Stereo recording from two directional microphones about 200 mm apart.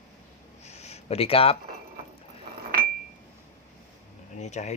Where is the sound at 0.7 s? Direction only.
35° left (ahead or behind).